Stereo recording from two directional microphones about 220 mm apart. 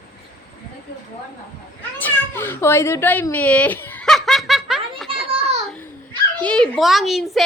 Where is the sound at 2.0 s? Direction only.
10° left (ahead or behind).